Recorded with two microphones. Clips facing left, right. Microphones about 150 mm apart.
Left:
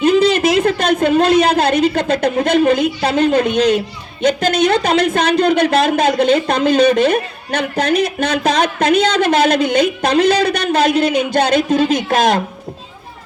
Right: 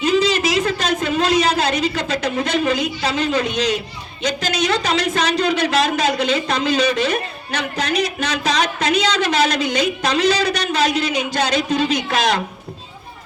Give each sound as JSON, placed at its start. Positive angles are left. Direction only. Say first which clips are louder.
{"t": 0.0, "sound": "a woman's voice", "louder": "left 5 dB", "side_deg": 55}